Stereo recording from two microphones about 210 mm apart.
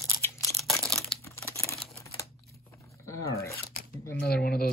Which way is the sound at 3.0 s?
15° left (ahead or behind).